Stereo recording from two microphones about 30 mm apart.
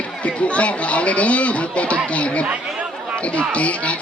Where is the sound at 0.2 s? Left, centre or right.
Left.